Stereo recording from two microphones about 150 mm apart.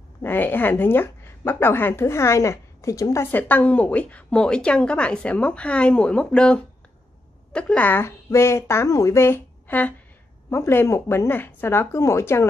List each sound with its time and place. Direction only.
0.2 s a woman's voice: 15° left (ahead or behind)